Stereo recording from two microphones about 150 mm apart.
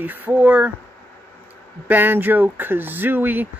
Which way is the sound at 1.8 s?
15° right (ahead or behind).